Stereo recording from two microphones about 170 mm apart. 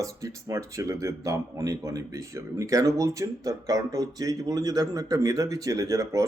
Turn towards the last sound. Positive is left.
turn(degrees=-20)  # may be behind; listen again after turning